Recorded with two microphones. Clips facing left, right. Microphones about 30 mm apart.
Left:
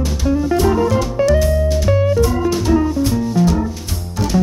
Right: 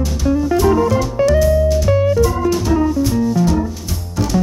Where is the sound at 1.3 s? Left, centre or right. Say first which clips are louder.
Right 3 dB; centre.